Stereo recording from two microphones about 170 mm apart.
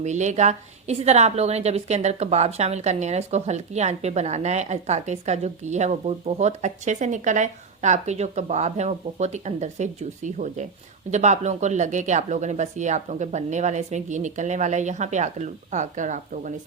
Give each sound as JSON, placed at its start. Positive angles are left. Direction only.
{"t": 0.0, "sound": "a woman's voice", "side_deg": -45}